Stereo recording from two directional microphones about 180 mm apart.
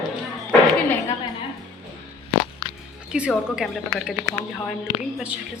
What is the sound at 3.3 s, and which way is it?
Speech, centre (ahead or behind).